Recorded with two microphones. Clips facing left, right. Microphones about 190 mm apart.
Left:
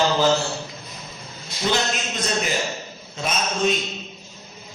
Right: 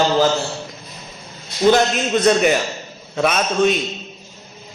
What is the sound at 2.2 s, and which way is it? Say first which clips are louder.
A man's voice: right 9 dB; 65° right (ahead or behind).